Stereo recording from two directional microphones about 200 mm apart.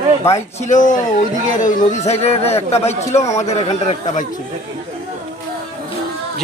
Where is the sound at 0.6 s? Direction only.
40° left (ahead or behind).